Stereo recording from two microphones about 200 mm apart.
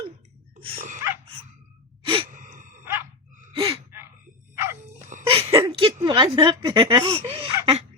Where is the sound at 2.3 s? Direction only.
40° right (ahead or behind).